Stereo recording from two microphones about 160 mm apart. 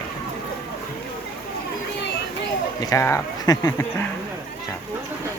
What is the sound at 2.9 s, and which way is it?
Speech, 20° left (ahead or behind).